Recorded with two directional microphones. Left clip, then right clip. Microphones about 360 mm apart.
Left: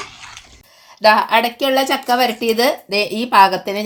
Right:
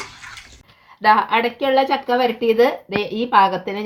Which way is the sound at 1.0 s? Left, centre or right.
Left.